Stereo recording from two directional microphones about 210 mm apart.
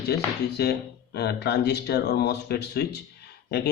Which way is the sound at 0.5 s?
50° left (ahead or behind).